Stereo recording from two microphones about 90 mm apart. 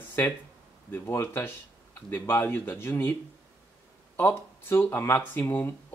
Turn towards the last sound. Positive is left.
turn(degrees=25)  # may be behind; listen again after turning